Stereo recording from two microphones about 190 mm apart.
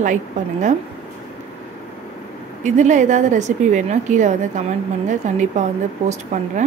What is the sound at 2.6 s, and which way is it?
A woman's voice, 40° right (ahead or behind).